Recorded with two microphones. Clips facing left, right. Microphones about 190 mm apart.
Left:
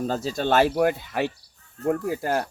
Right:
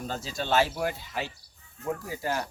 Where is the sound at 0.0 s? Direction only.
45° left (ahead or behind).